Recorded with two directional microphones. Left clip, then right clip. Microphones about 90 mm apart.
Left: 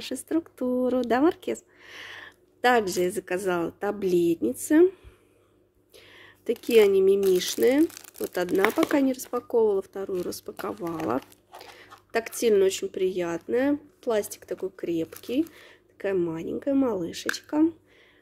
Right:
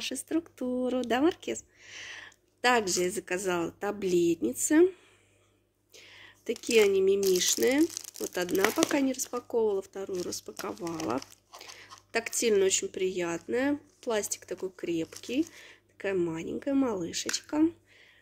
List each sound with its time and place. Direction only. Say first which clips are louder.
0.0 s speech: left 3 dB; 55° left (ahead or behind)
2.6 s speech: left 4 dB; 40° left (ahead or behind)
10.7 s speech: left 4 dB; 15° left (ahead or behind)
11.5 s speech: left 3 dB; 45° left (ahead or behind)